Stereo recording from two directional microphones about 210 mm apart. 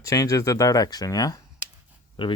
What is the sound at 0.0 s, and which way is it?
Speech, 15° left (ahead or behind).